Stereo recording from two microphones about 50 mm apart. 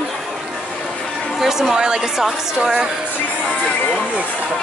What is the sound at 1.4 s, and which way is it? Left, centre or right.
A woman's voice, centre.